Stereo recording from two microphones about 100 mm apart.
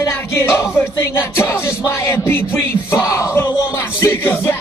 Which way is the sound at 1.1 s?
30° left (ahead or behind).